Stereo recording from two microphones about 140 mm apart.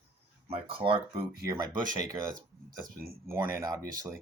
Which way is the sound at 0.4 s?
40° right (ahead or behind).